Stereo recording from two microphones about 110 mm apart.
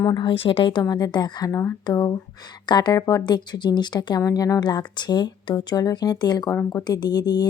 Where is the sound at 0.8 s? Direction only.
35° left (ahead or behind).